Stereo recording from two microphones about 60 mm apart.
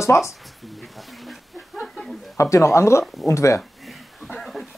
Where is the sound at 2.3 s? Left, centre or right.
Left.